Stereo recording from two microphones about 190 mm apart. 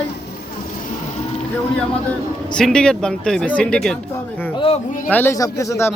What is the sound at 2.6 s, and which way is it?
Speech, 5° left (ahead or behind).